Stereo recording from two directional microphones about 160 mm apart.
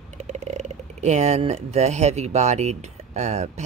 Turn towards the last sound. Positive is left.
turn(degrees=-45)  # may be behind; listen again after turning